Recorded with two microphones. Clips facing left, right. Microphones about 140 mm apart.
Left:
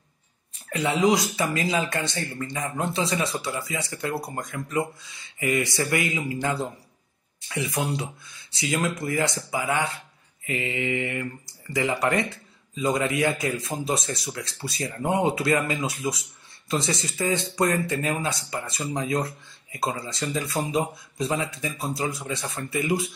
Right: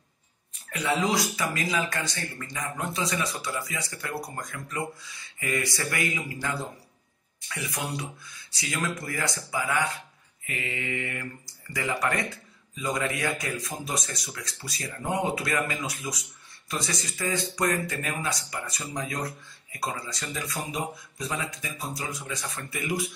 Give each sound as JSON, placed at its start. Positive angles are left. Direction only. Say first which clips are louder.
{"t": 0.7, "sound": "speech", "louder": "left 2 dB", "side_deg": 25}
{"t": 0.9, "sound": "speech", "louder": "left 6 dB", "side_deg": 15}
{"t": 1.3, "sound": "speech", "louder": "left 4 dB", "side_deg": 25}